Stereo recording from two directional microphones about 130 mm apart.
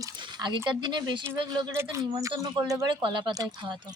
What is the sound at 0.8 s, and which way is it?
Speech, 35° right (ahead or behind).